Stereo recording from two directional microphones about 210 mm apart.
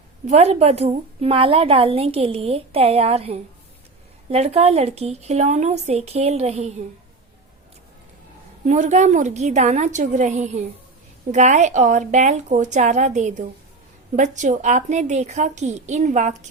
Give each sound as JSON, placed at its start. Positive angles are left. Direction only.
{"t": 0.3, "sound": "a woman's voice", "side_deg": -30}
{"t": 8.6, "sound": "speech", "side_deg": -35}